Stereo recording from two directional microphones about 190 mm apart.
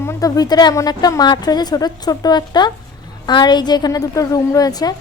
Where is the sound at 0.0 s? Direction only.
15° left (ahead or behind).